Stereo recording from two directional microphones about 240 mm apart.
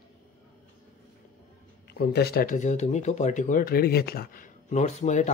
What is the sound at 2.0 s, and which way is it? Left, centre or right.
Speech, left.